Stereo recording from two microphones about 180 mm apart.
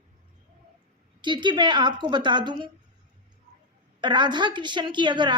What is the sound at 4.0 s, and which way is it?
A woman's voice, 25° right (ahead or behind).